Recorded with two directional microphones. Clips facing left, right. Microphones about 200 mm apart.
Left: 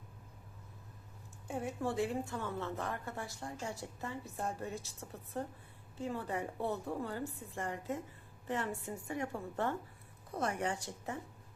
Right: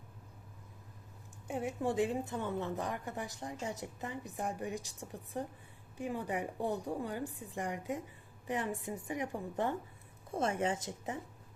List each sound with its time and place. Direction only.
1.5 s a woman's voice: 20° right (ahead or behind)